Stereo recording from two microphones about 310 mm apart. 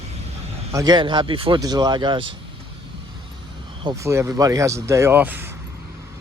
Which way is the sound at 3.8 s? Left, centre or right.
Centre.